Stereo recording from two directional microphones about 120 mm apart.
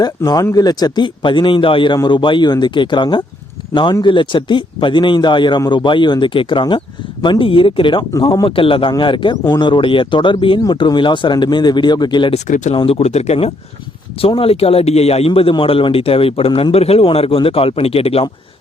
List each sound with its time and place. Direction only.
0.0 s a man's voice: 30° left (ahead or behind)
12.3 s speech: 85° left
12.7 s a man's voice: 50° left (ahead or behind)